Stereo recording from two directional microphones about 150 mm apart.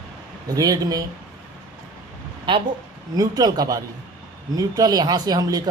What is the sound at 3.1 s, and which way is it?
Speech, 25° right (ahead or behind).